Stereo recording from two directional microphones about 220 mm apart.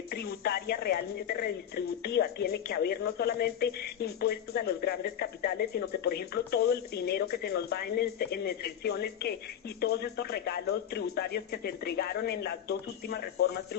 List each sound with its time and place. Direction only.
0.1 s speech: 45° left (ahead or behind)